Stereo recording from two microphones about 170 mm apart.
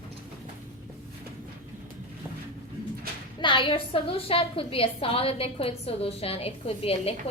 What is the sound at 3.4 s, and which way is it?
A woman's voice, 30° left (ahead or behind).